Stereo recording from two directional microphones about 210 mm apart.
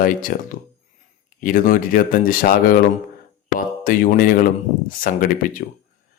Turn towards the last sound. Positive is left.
turn(degrees=40)  # may be behind; listen again after turning